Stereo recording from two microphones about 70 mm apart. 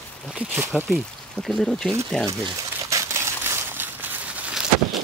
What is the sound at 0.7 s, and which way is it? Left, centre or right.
Speech, centre.